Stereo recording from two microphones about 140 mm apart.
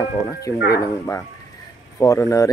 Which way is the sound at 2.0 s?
20° left (ahead or behind).